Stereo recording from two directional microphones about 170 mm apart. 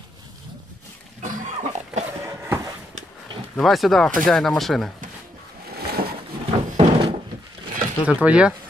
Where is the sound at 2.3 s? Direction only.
15° right (ahead or behind).